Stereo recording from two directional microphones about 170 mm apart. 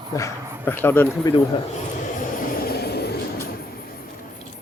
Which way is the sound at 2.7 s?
70° left (ahead or behind).